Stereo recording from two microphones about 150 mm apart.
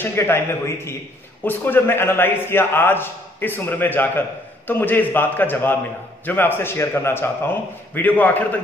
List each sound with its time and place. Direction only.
0.0 s a man's voice: 15° left (ahead or behind)